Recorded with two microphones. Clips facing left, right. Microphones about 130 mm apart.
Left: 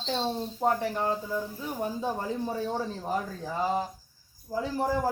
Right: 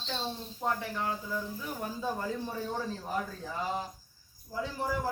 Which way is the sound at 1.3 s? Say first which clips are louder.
Left 4 dB; 25° left (ahead or behind).